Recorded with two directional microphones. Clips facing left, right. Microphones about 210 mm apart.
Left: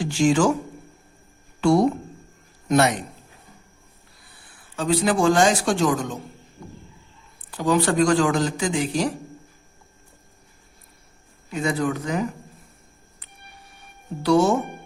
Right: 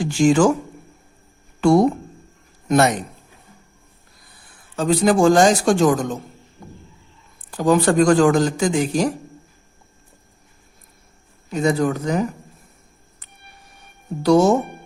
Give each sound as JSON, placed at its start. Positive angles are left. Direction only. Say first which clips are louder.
{"t": 0.0, "sound": "speech", "louder": "right 4 dB", "side_deg": -50}
{"t": 1.6, "sound": "a man's voice", "louder": "right 3 dB", "side_deg": -45}
{"t": 4.8, "sound": "speech", "louder": "right 5 dB", "side_deg": -45}
{"t": 7.5, "sound": "speech", "louder": "right 4 dB", "side_deg": -45}
{"t": 11.5, "sound": "speech", "louder": "right 5 dB", "side_deg": -40}
{"t": 14.2, "sound": "speech", "louder": "right 4 dB", "side_deg": -40}